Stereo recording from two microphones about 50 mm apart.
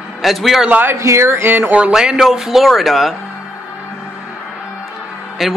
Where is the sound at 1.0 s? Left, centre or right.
Right.